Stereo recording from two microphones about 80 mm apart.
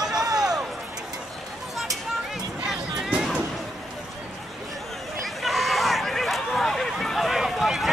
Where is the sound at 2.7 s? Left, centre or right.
Centre.